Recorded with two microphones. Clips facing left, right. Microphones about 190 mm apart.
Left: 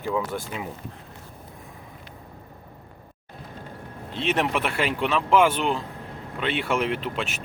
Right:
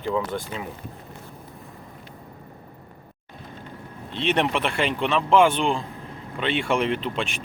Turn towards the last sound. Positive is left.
turn(degrees=5)  # may be behind; listen again after turning